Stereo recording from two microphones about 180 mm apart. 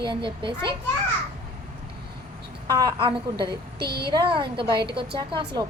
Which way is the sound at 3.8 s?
60° right (ahead or behind).